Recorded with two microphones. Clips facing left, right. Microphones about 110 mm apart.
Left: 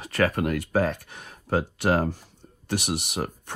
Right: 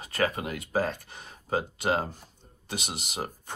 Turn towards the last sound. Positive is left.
turn(degrees=60)  # may be behind; listen again after turning